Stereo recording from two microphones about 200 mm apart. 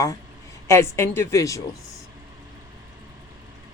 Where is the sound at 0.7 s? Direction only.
15° left (ahead or behind).